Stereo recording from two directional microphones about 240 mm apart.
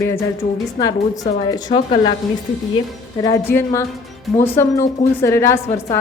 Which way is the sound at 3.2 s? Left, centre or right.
Centre.